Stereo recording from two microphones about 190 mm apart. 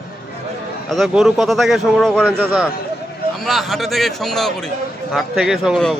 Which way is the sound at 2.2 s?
10° right (ahead or behind).